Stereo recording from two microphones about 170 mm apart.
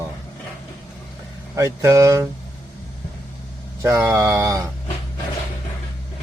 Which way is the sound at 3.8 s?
15° right (ahead or behind).